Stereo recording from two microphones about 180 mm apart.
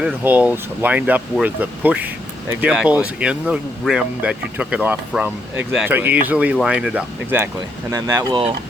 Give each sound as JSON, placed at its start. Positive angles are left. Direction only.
{"t": 0.0, "sound": "speech", "side_deg": -10}